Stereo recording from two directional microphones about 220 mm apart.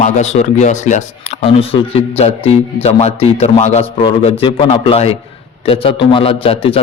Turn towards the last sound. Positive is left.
turn(degrees=25)  # may be behind; listen again after turning